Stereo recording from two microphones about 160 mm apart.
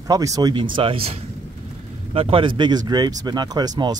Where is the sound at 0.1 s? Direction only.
20° right (ahead or behind).